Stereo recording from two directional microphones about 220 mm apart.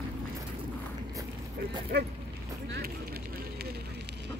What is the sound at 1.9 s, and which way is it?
Speech, 50° right (ahead or behind).